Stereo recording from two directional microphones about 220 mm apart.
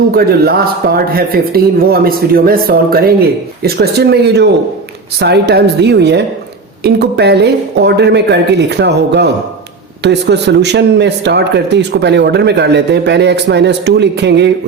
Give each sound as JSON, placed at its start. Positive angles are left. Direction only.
{"t": 0.1, "sound": "a man's voice", "side_deg": -45}